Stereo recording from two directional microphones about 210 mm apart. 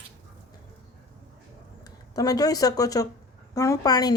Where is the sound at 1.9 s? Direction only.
15° left (ahead or behind).